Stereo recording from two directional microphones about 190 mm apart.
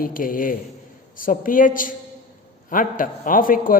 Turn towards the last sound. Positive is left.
turn(degrees=45)  # may be behind; listen again after turning